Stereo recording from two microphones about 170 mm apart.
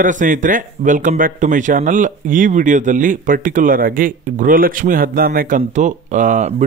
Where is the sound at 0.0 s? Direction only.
50° right (ahead or behind).